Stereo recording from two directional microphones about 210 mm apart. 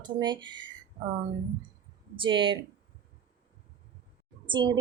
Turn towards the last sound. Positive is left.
turn(degrees=-20)  # may be behind; listen again after turning